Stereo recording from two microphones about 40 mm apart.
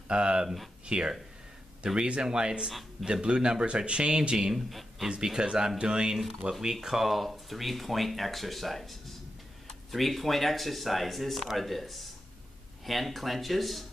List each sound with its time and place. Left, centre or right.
0.1 s speech: right
4.6 s speech: centre
5.0 s speech: centre
6.6 s speech: centre